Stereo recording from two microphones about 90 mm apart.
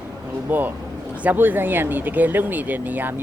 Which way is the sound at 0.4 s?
20° right (ahead or behind).